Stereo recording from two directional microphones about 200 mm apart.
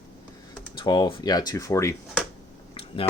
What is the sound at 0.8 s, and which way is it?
Speech, 20° left (ahead or behind).